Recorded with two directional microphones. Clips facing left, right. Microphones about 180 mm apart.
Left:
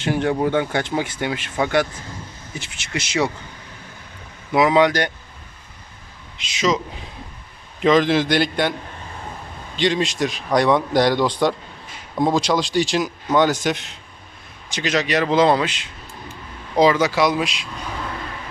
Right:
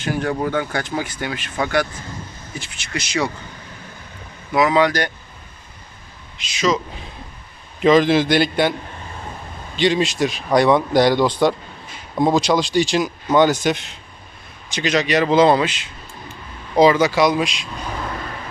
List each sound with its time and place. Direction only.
0.0 s speech: 25° left (ahead or behind)
4.5 s speech: 25° left (ahead or behind)
6.4 s speech: 25° left (ahead or behind)
7.8 s speech: 5° right (ahead or behind)
9.7 s speech: 5° right (ahead or behind)